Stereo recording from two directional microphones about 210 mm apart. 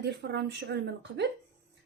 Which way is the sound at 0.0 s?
55° right (ahead or behind).